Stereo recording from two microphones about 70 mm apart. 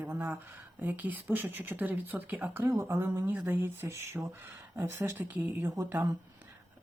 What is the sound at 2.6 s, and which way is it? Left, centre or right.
Speech, right.